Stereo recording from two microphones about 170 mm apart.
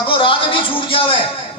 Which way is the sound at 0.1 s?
30° left (ahead or behind).